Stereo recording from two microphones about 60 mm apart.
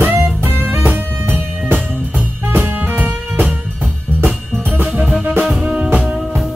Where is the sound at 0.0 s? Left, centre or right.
Right.